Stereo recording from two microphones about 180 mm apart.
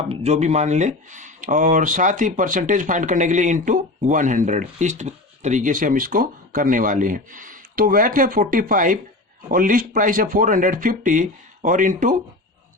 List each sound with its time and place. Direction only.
0.1 s speech: 35° right (ahead or behind)